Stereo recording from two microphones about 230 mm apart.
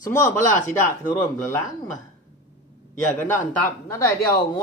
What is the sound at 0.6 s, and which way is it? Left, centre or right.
Speech, left.